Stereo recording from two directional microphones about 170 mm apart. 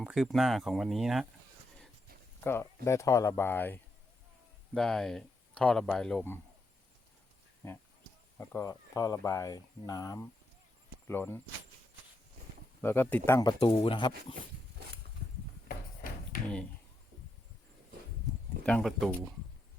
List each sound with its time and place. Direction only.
0.0 s speech: 5° right (ahead or behind)
2.4 s speech: 15° left (ahead or behind)
7.6 s speech: 15° left (ahead or behind)
12.8 s speech: 15° left (ahead or behind)
13.4 s speech: 25° left (ahead or behind)
18.6 s speech: 5° left (ahead or behind)